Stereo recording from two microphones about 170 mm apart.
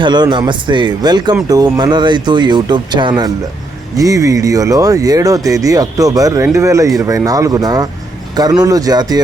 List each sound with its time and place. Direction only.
0.0 s speech: 25° right (ahead or behind)